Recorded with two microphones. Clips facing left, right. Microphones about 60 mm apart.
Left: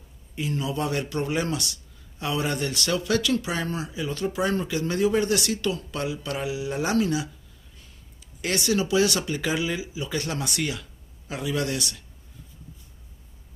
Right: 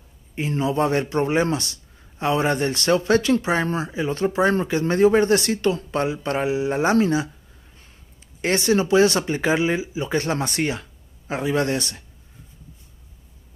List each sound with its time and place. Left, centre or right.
0.4 s speech: right
8.4 s speech: right